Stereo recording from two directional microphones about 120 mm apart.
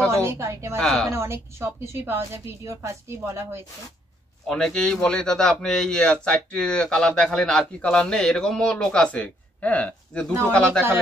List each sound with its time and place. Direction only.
0.1 s a woman's voice: 25° right (ahead or behind)
0.7 s speech: centre (ahead or behind)
1.1 s a woman's voice: 20° right (ahead or behind)
4.5 s a man's voice: 5° left (ahead or behind)